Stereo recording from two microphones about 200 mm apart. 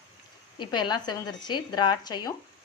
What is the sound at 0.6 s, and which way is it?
Speech, 20° left (ahead or behind).